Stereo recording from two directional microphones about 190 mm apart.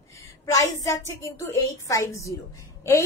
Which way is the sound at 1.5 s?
15° left (ahead or behind).